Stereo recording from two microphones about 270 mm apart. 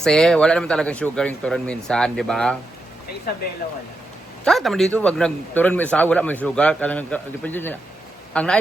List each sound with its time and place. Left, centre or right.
0.0 s a man's voice: centre
3.3 s speech: left
4.4 s a man's voice: centre